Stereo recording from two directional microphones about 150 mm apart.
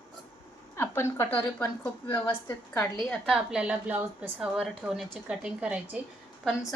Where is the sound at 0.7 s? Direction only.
15° left (ahead or behind).